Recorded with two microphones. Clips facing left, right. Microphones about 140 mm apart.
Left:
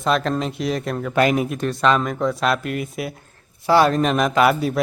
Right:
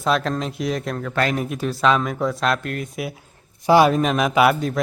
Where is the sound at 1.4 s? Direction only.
Centre (ahead or behind).